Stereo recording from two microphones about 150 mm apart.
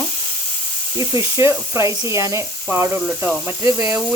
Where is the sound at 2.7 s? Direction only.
15° right (ahead or behind).